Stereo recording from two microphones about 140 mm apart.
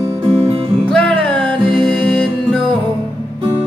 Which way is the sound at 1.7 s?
5° left (ahead or behind).